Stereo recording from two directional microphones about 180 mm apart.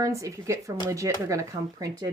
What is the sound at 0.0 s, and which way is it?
Speech, 15° right (ahead or behind).